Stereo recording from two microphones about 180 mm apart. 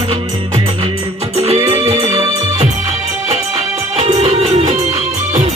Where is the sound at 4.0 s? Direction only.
40° right (ahead or behind).